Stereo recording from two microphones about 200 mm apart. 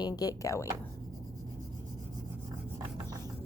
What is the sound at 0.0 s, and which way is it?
Speech, 20° left (ahead or behind).